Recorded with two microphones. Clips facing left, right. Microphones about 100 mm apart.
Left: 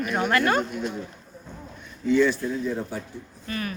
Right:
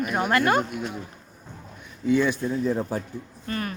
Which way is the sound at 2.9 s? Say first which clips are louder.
Right 4 dB; 45° right (ahead or behind).